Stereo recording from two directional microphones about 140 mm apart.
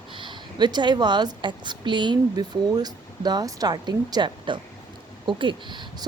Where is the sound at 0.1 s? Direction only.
35° right (ahead or behind).